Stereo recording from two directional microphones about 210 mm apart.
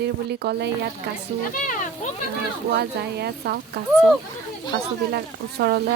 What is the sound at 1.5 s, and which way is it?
Music, 40° left (ahead or behind).